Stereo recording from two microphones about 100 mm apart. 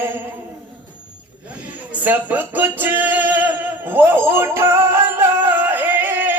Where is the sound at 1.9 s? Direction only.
15° right (ahead or behind).